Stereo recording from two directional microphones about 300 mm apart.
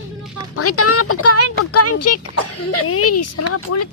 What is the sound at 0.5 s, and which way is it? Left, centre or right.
Speech, left.